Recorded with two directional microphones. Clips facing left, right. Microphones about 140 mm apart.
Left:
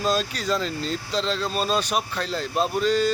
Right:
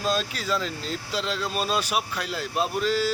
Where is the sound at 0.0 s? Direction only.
Centre (ahead or behind).